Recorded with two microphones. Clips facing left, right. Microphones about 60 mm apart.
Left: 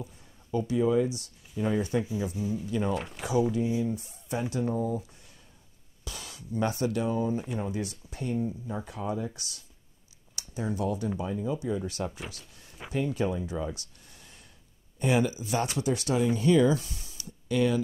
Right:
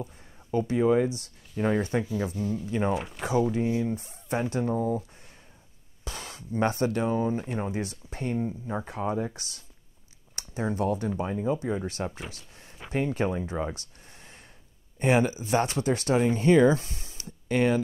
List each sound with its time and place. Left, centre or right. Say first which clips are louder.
0.0 s speech: right 4 dB; right
2.3 s speech: right 1 dB; centre
2.6 s speech: right 3 dB; right
2.9 s speech: right 2 dB; centre
3.5 s speech: right 1 dB; right
6.0 s speech: right 3 dB; right
12.3 s a sound: right 1 dB; right
12.9 s speech: right 2 dB; right